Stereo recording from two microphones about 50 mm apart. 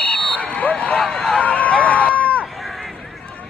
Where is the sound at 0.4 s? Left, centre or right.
Left.